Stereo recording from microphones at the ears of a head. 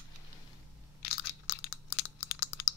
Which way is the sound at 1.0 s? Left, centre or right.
Left.